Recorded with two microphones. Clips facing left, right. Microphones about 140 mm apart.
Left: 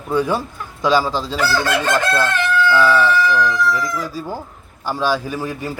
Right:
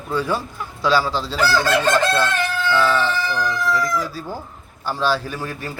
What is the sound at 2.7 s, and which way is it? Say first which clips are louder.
A man's voice: left 3 dB; 10° left (ahead or behind).